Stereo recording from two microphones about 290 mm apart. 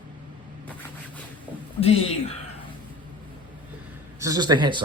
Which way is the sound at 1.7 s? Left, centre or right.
Centre.